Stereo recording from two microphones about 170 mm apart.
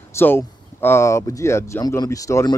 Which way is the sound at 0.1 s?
15° left (ahead or behind).